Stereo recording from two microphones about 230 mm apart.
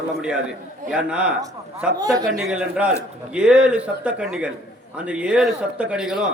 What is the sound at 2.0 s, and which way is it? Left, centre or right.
Speech, centre.